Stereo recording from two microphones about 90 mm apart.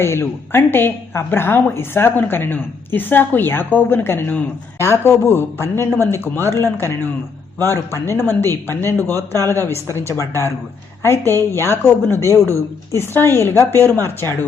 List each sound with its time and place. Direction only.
0.0 s a woman's voice: 30° left (ahead or behind)